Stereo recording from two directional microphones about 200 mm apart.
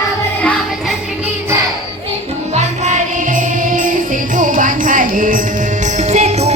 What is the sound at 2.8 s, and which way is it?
Music, 40° right (ahead or behind).